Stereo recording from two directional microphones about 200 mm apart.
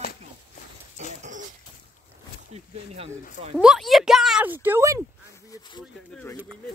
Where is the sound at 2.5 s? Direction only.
30° right (ahead or behind).